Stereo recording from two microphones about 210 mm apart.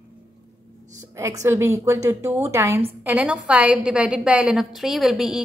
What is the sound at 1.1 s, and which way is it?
A woman's voice, 15° right (ahead or behind).